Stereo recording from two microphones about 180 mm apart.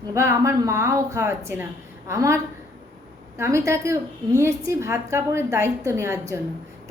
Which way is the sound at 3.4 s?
15° right (ahead or behind).